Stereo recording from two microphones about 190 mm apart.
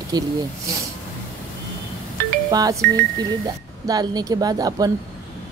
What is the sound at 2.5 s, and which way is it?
Speech, 20° right (ahead or behind).